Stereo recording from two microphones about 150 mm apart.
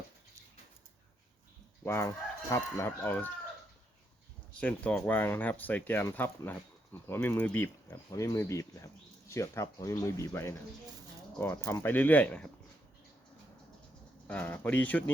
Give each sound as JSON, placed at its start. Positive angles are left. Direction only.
{"t": 1.8, "sound": "speech", "side_deg": 15}
{"t": 4.5, "sound": "speech", "side_deg": 10}
{"t": 14.3, "sound": "speech", "side_deg": 10}